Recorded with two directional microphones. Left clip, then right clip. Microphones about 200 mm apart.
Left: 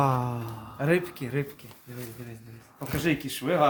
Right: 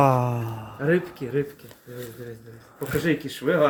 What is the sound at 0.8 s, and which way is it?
Speech, 45° left (ahead or behind).